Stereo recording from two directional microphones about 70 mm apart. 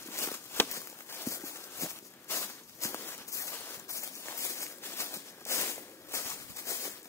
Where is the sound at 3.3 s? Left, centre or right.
Left.